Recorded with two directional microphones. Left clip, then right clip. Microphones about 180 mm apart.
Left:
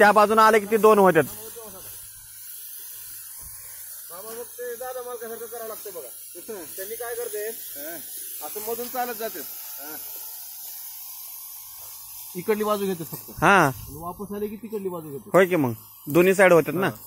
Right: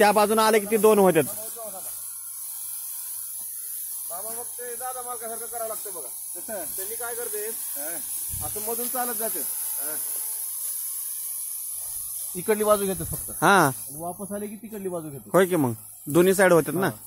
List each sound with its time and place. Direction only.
0.0 s a man's voice: 10° right (ahead or behind)
1.4 s snake: 25° right (ahead or behind)
4.1 s speech: 25° right (ahead or behind)
8.8 s speech: 10° left (ahead or behind)
9.3 s speech: 10° right (ahead or behind)
12.4 s a man's voice: 15° right (ahead or behind)
13.4 s speech: 5° right (ahead or behind)
14.3 s a man's voice: 15° right (ahead or behind)